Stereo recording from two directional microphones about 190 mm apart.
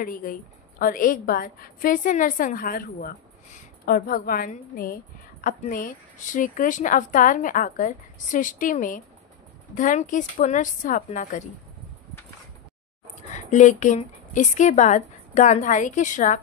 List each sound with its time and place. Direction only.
0.0 s a woman's voice: 45° left (ahead or behind)
13.3 s a woman's voice: 40° left (ahead or behind)